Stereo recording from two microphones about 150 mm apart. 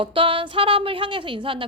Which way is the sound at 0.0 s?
35° right (ahead or behind).